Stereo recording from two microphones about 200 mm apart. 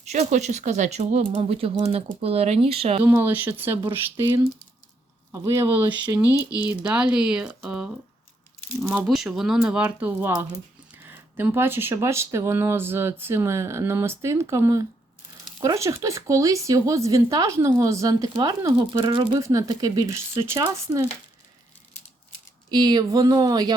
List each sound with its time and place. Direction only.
0.0 s speech: 35° right (ahead or behind)
3.0 s speech: 10° right (ahead or behind)
5.3 s speech: 15° right (ahead or behind)
22.7 s speech: 20° right (ahead or behind)